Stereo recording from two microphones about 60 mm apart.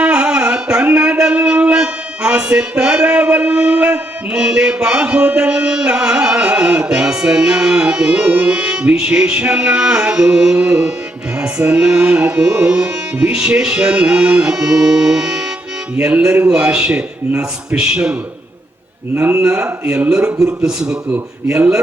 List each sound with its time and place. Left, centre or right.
0.0 s music: centre
16.5 s music: centre
19.3 s music: centre
21.4 s speech: right